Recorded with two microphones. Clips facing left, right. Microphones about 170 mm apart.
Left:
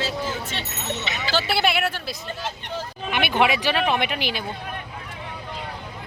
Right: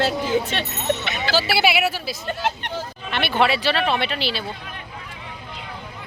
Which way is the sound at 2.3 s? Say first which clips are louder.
Right 10 dB; 70° right (ahead or behind).